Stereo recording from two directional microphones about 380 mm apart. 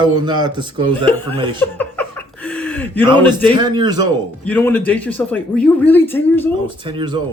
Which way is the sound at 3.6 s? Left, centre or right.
Centre.